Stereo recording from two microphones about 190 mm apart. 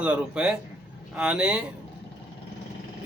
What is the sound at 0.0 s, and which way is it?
A man's voice, 5° right (ahead or behind).